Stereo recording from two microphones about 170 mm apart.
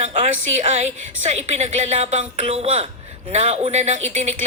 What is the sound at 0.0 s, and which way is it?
A woman's voice, 40° right (ahead or behind).